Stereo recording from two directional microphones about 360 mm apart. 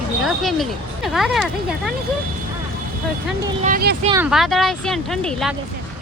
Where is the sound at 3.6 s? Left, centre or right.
Right.